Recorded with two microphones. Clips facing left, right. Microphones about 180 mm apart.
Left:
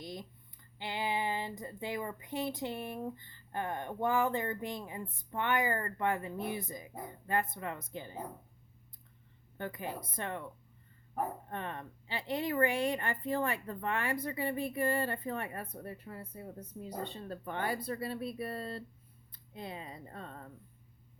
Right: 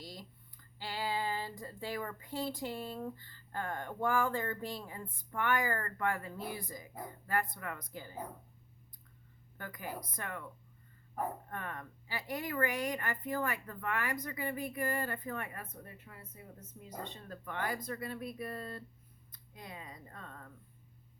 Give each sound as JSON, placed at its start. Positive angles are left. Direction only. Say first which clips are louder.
{"t": 0.0, "sound": "a sound", "louder": "left 5 dB", "side_deg": 20}
{"t": 0.8, "sound": "speech", "louder": "left 2 dB", "side_deg": 20}
{"t": 9.6, "sound": "speech", "louder": "left 4 dB", "side_deg": 25}
{"t": 11.4, "sound": "speech", "louder": "left 3 dB", "side_deg": 25}